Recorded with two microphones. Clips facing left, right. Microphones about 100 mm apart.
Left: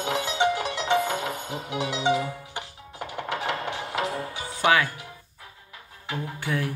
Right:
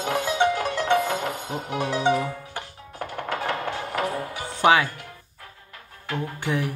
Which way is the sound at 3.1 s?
20° left (ahead or behind).